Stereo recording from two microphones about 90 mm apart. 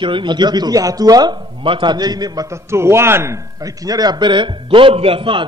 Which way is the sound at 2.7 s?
30° right (ahead or behind).